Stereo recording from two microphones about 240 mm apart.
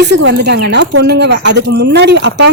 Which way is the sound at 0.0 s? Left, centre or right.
Right.